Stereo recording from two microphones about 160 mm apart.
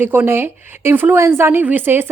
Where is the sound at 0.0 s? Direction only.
15° right (ahead or behind).